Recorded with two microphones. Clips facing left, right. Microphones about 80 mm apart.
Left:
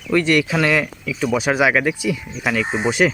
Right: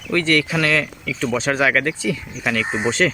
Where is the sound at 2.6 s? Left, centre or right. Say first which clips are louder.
Left 1 dB; centre.